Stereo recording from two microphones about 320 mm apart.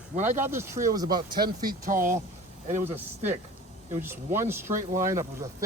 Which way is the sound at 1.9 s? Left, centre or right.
Right.